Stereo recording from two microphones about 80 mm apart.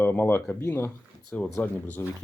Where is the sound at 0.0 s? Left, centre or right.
Left.